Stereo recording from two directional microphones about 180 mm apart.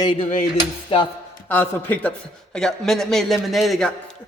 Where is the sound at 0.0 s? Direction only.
25° left (ahead or behind).